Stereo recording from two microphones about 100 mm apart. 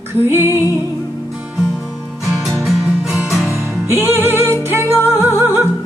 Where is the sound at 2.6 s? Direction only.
5° right (ahead or behind).